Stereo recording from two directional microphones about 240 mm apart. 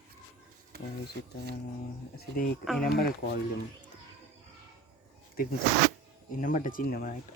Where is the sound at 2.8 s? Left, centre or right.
Left.